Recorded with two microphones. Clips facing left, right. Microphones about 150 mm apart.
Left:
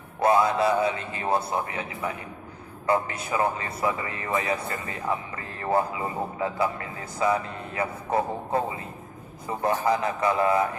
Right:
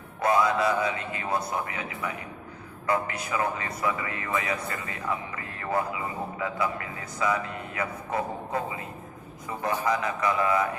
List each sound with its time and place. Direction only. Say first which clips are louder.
0.2 s a man's voice: left 2 dB; 30° left (ahead or behind)
9.8 s speech: left 1 dB; 30° left (ahead or behind)